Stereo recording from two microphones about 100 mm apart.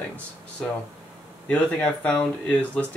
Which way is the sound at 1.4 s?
15° left (ahead or behind).